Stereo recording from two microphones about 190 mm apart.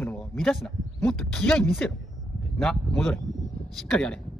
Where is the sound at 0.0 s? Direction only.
10° left (ahead or behind).